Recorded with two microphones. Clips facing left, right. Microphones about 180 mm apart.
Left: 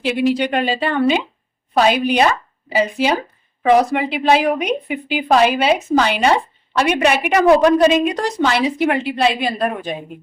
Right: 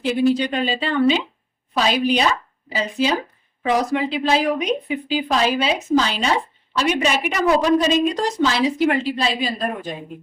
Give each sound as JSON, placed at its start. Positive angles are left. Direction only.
{"t": 0.0, "sound": "speech", "side_deg": 75}
{"t": 0.3, "sound": "a woman's voice", "side_deg": 65}